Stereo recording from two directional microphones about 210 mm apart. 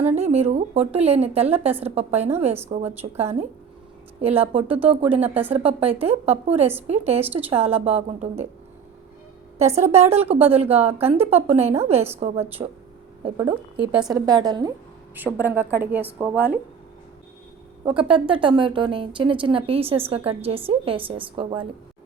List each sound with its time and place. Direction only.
0.2 s speech: 30° right (ahead or behind)
9.7 s speech: 30° right (ahead or behind)
15.1 s speech: 10° right (ahead or behind)
17.8 s speech: 25° right (ahead or behind)